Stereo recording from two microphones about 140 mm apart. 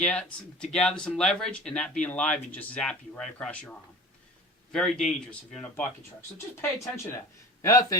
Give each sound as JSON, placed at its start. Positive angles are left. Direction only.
{"t": 0.0, "sound": "speech", "side_deg": 10}
{"t": 6.6, "sound": "speech", "side_deg": 20}